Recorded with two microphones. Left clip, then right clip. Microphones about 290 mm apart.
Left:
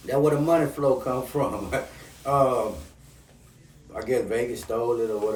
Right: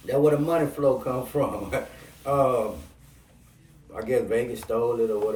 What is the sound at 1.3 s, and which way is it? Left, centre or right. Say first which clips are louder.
Speech: right 1 dB; centre.